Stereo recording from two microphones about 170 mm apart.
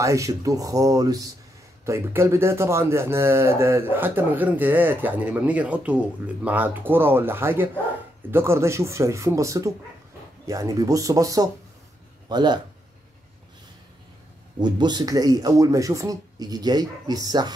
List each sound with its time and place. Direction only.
0.0 s speech: 20° right (ahead or behind)
14.6 s speech: 25° right (ahead or behind)